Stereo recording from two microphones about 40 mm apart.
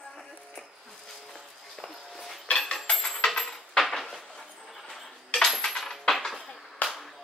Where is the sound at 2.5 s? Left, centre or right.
Centre.